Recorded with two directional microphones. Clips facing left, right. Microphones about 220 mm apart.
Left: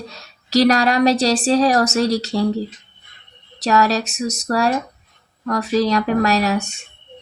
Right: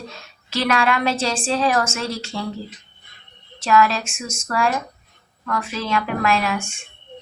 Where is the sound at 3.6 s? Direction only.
40° left (ahead or behind).